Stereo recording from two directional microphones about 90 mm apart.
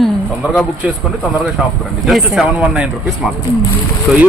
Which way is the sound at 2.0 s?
5° right (ahead or behind).